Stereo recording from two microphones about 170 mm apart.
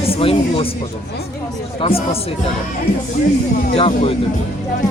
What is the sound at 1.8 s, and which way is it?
Speech, 35° left (ahead or behind).